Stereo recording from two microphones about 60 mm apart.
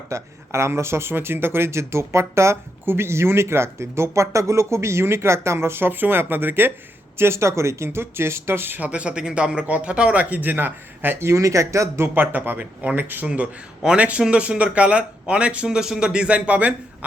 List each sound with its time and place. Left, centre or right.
0.1 s speech: right
8.9 s speech: centre; by 11.2 s right
11.2 s speech: right
12.1 s speech: right